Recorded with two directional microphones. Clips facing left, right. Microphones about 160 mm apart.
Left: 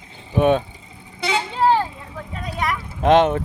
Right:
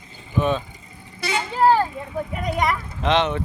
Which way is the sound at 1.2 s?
25° left (ahead or behind).